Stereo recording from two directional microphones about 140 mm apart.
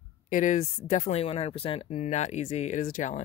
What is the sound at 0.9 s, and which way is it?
Speech, 55° left (ahead or behind).